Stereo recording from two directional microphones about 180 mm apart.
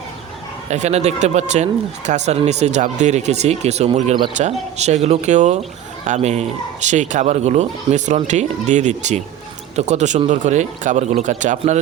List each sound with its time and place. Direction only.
0.7 s speech: 40° right (ahead or behind)